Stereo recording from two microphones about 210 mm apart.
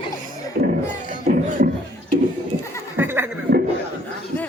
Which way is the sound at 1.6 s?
45° right (ahead or behind).